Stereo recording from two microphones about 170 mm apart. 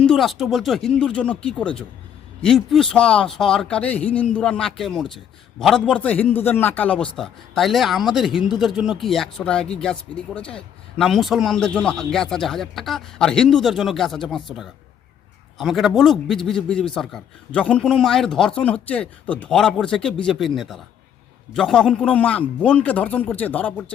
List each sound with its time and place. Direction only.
0.0 s a man's voice: centre (ahead or behind)